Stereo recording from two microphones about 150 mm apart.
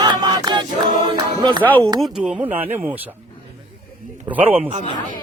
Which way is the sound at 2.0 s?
5° right (ahead or behind).